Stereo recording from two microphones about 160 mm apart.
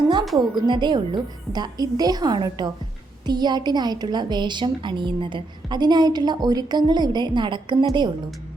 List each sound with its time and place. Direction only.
0.3 s a woman's voice: 30° right (ahead or behind)